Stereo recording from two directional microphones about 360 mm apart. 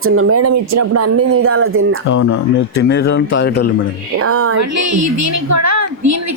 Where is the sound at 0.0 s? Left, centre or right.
Right.